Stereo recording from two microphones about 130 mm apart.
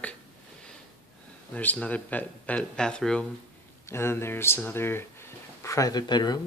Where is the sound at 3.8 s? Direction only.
20° left (ahead or behind).